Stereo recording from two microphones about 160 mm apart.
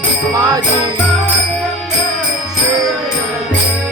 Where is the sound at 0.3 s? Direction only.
20° right (ahead or behind).